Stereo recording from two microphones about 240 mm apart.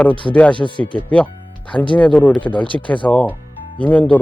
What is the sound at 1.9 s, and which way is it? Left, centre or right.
Speech, centre.